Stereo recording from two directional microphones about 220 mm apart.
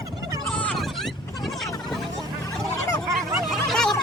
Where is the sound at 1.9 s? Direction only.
Centre (ahead or behind).